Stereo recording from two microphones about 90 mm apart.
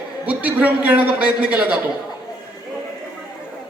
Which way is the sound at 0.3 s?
15° right (ahead or behind).